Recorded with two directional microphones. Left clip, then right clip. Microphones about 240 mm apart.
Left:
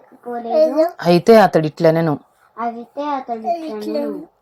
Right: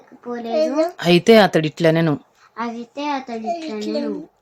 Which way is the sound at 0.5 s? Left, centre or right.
Centre.